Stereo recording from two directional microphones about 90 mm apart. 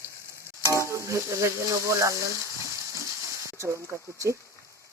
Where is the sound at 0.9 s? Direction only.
35° right (ahead or behind).